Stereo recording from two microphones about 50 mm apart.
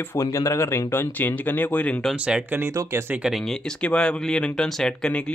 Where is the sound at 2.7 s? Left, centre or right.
Right.